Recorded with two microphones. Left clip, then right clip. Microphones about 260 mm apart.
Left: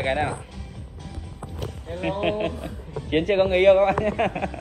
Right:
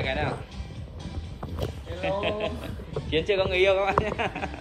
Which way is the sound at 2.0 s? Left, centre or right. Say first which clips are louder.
Left 3 dB; centre.